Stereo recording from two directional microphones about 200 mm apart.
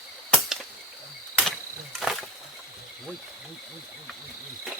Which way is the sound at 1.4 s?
Centre (ahead or behind).